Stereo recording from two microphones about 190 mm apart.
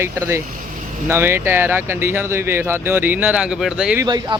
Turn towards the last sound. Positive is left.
turn(degrees=-20)  # may be behind; listen again after turning